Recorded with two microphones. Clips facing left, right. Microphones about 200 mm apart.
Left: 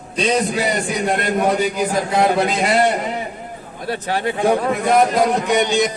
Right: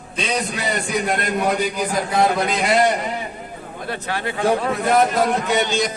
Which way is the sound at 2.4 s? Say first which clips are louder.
Left 3 dB; 25° left (ahead or behind).